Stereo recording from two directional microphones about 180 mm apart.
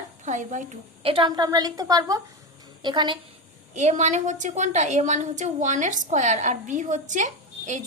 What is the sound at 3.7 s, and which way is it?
A woman's voice, 40° right (ahead or behind).